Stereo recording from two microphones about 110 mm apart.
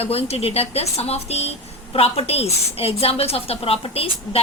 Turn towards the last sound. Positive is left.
turn(degrees=60)  # may be behind; listen again after turning